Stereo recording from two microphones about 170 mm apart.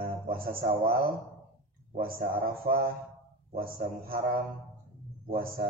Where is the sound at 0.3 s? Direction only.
60° right (ahead or behind).